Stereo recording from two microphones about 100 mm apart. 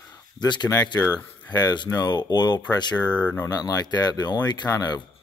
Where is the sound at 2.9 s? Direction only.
15° left (ahead or behind).